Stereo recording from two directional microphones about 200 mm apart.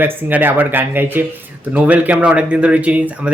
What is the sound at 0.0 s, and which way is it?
Speech, 10° right (ahead or behind).